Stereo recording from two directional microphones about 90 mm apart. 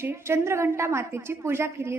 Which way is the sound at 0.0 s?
25° right (ahead or behind).